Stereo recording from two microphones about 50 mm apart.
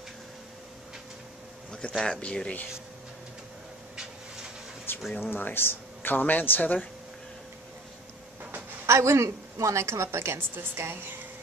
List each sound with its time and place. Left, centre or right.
1.7 s speech: centre
4.9 s a sound: left
5.3 s speech: left
8.8 s a woman's voice: right